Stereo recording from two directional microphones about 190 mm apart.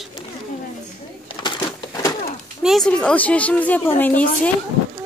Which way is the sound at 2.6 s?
Centre (ahead or behind).